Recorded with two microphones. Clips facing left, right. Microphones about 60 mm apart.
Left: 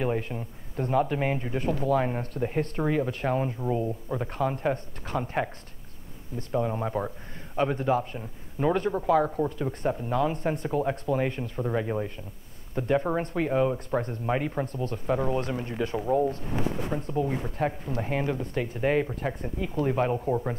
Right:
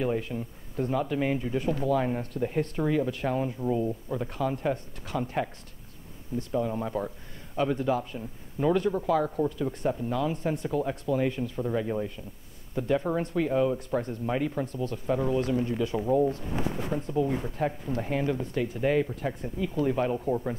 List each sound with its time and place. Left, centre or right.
0.0 s a man's voice: left
6.5 s a man's voice: left